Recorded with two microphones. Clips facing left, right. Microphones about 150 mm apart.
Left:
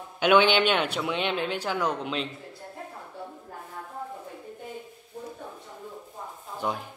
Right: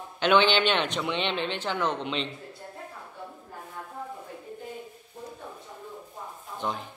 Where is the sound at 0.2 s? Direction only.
10° left (ahead or behind).